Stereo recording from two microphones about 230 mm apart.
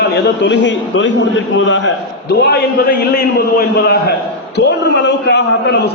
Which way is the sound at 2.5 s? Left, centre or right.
Left.